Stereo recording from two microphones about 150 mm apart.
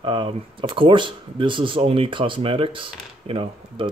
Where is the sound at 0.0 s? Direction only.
30° right (ahead or behind).